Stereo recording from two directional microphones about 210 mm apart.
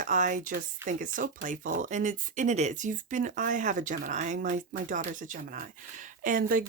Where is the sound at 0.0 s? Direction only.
35° right (ahead or behind).